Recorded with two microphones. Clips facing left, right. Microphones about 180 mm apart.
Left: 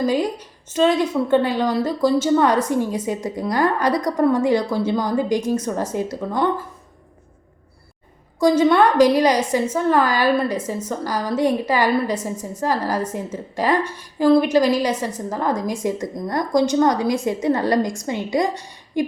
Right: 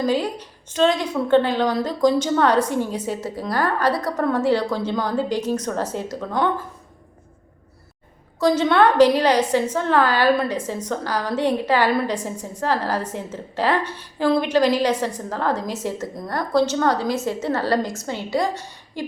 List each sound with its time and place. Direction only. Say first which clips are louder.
0.0 s a woman's voice: left 1 dB; 10° left (ahead or behind)
8.4 s a woman's voice: left 2 dB; 10° left (ahead or behind)